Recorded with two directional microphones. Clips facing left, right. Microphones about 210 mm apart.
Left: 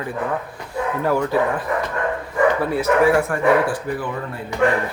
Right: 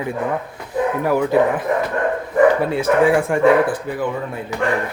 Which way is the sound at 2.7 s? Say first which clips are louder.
Right 1 dB; 20° right (ahead or behind).